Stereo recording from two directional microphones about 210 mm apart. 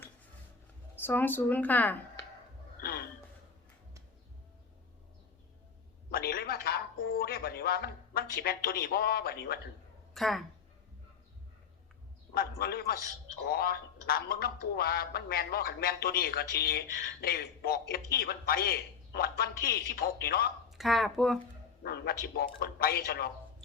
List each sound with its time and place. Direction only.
0.9 s a woman's voice: 10° left (ahead or behind)
6.1 s a sound: 45° left (ahead or behind)
7.1 s a man's voice: 45° left (ahead or behind)
10.2 s speech: centre (ahead or behind)
12.3 s a man's voice: 45° left (ahead or behind)
20.7 s speech: centre (ahead or behind)
21.8 s a man's voice: 50° left (ahead or behind)